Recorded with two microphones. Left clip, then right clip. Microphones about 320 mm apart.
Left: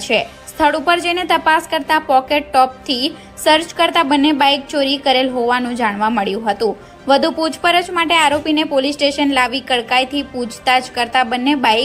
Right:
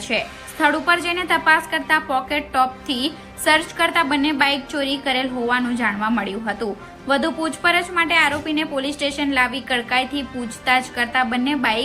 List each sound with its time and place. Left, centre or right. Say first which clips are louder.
0.6 s a woman's voice: left 4 dB; centre